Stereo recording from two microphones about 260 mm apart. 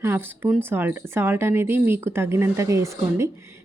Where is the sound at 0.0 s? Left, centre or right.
Centre.